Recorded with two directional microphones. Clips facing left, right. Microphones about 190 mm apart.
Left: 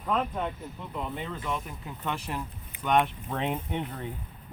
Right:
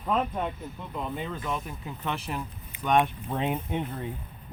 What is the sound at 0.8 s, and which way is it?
Speech, centre (ahead or behind).